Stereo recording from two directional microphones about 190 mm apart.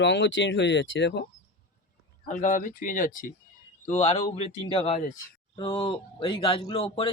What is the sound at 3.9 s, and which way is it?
Speech, 35° left (ahead or behind).